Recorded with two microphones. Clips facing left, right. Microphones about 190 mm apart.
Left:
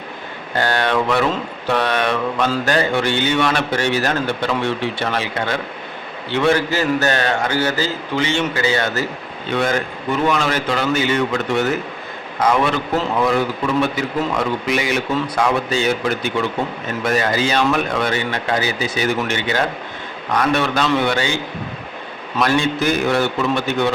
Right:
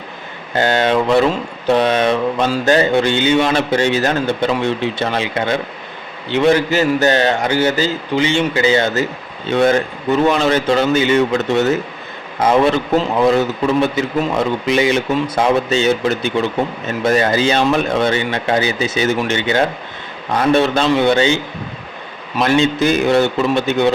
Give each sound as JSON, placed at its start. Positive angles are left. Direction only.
{"t": 0.5, "sound": "speech", "side_deg": -20}
{"t": 22.4, "sound": "speech", "side_deg": -25}